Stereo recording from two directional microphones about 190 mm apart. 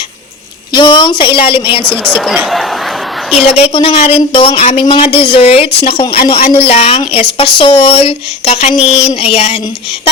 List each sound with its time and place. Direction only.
0.7 s speech: 25° left (ahead or behind)
1.8 s speech: 5° left (ahead or behind)
3.5 s a woman's voice: 30° left (ahead or behind)